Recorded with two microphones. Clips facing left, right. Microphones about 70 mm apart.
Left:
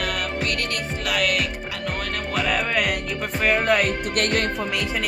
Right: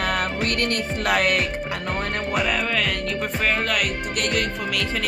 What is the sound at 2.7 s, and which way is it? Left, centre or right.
Music, centre.